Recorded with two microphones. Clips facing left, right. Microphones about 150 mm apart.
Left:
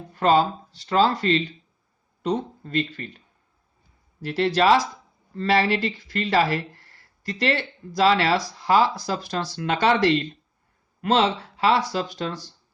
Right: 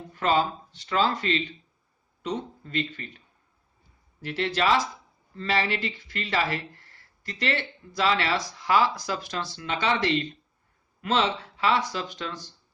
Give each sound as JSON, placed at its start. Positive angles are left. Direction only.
{"t": 0.1, "sound": "speech", "side_deg": 40}
{"t": 4.2, "sound": "speech", "side_deg": 35}
{"t": 9.6, "sound": "speech", "side_deg": 50}